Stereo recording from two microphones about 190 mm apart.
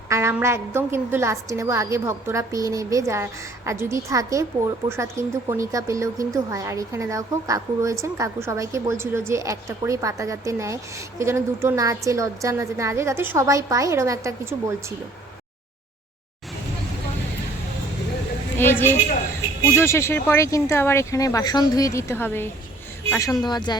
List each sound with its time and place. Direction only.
0.1 s a woman's voice: 15° right (ahead or behind)
18.5 s a woman's voice: 10° left (ahead or behind)